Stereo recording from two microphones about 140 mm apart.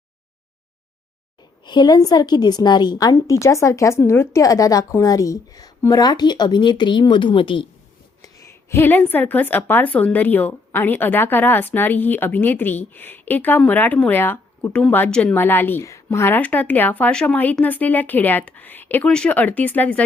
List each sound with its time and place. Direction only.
1.6 s a woman's voice: 30° left (ahead or behind)
8.2 s a woman's voice: 20° left (ahead or behind)